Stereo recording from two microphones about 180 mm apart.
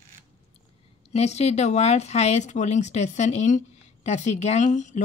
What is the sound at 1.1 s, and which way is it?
Speech, 35° left (ahead or behind).